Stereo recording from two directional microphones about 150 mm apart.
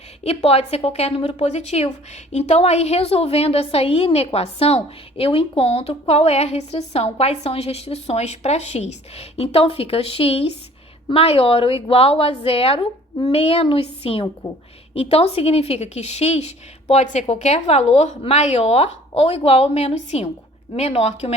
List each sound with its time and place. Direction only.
0.3 s a woman's voice: 45° left (ahead or behind)